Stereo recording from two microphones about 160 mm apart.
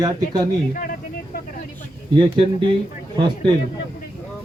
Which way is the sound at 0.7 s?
60° left (ahead or behind).